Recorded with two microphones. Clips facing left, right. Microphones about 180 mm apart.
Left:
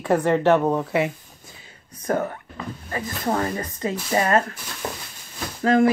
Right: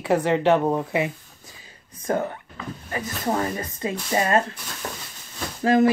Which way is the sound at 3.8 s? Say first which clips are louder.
Left 1 dB; 25° right (ahead or behind).